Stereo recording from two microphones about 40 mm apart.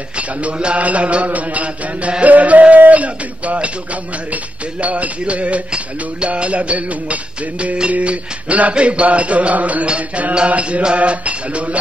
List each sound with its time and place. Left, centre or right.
0.4 s mantra: right
4.8 s mantra: right
7.6 s music: right
7.9 s mantra: right